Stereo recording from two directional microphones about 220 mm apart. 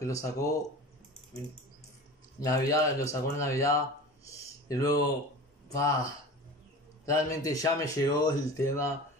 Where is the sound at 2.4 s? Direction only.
15° left (ahead or behind).